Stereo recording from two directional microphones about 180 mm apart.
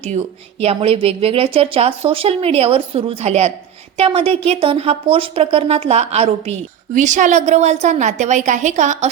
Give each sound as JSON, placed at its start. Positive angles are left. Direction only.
{"t": 0.0, "sound": "a woman's voice", "side_deg": -40}